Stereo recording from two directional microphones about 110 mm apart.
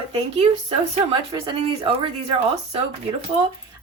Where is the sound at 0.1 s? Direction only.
75° right (ahead or behind).